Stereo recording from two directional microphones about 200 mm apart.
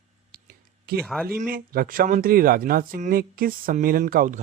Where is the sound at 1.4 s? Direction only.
45° right (ahead or behind).